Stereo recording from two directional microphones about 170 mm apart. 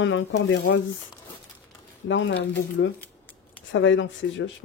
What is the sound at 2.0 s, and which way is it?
Speech, 90° left.